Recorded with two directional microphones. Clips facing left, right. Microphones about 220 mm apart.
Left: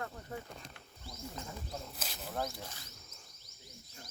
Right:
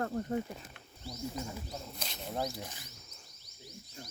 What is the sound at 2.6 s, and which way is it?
Speech, 15° right (ahead or behind).